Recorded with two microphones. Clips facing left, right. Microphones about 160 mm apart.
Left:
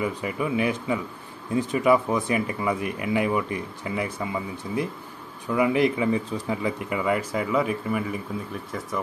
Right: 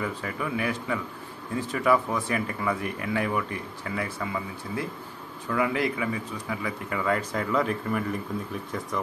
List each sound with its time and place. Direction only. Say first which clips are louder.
0.0 s speech: left 4 dB; 15° left (ahead or behind)